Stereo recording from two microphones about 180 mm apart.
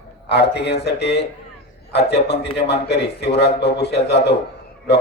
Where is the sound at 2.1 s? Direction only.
35° left (ahead or behind).